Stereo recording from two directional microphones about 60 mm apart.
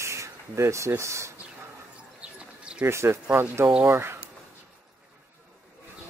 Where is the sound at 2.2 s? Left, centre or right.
Centre.